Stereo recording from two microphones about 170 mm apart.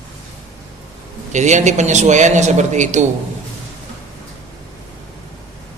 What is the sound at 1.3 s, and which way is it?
A man's voice, 45° right (ahead or behind).